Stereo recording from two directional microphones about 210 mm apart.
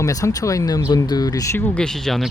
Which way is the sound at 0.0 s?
15° left (ahead or behind).